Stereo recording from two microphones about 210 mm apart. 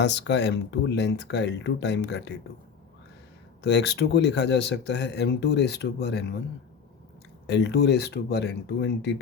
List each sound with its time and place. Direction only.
0.0 s speech: 55° left (ahead or behind)
3.6 s speech: 55° left (ahead or behind)
7.4 s speech: 55° left (ahead or behind)